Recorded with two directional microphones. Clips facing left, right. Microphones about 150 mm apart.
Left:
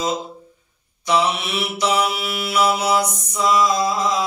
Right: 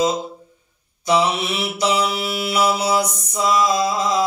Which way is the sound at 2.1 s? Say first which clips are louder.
Right 1 dB; 30° right (ahead or behind).